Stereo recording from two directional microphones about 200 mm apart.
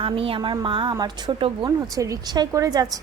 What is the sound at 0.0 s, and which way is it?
A woman's voice, 25° right (ahead or behind).